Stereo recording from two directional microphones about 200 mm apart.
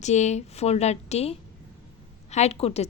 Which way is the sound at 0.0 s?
35° left (ahead or behind).